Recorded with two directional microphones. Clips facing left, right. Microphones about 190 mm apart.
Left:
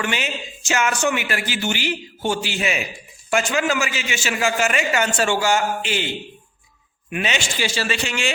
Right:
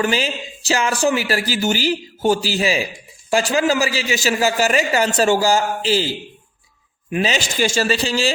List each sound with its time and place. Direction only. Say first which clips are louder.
0.0 s a man's voice: right 5 dB; 35° right (ahead or behind)